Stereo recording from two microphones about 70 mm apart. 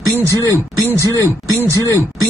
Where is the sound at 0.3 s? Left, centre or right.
Left.